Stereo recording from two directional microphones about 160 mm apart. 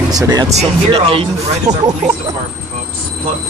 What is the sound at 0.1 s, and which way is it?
Speech, 25° right (ahead or behind).